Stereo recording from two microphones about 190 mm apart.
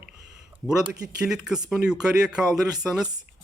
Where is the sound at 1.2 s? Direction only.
5° right (ahead or behind).